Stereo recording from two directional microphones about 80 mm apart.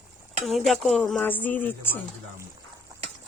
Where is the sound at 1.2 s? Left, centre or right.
Left.